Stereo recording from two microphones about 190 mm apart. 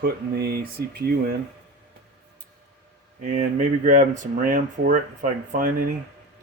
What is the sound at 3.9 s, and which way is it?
Speech, 40° right (ahead or behind).